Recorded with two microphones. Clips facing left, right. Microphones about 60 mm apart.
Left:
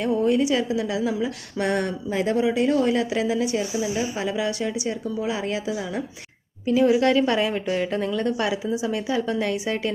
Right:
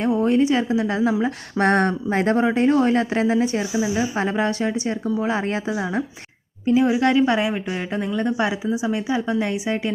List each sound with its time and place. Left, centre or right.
0.2 s speech: right
6.7 s a woman's voice: right